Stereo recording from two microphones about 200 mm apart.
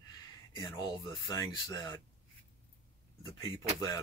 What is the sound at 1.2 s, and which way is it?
Speech, 20° left (ahead or behind).